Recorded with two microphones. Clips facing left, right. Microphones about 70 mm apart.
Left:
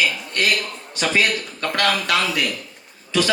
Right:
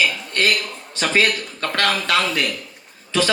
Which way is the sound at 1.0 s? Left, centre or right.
Right.